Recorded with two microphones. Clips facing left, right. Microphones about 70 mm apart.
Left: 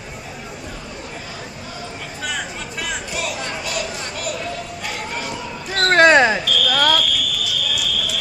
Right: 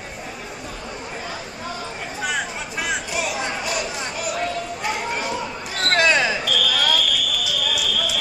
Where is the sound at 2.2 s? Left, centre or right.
Centre.